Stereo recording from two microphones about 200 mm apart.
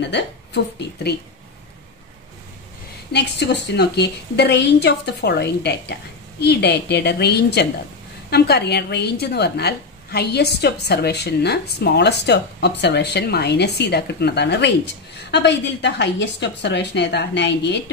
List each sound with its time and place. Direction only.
0.0 s a woman's voice: 60° left (ahead or behind)
3.1 s a woman's voice: 55° left (ahead or behind)